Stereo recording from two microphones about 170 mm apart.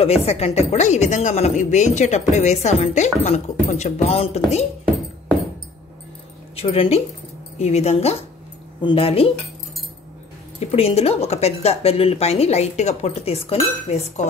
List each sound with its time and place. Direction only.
0.0 s speech: 35° left (ahead or behind)
6.5 s speech: 35° left (ahead or behind)
10.6 s speech: 35° left (ahead or behind)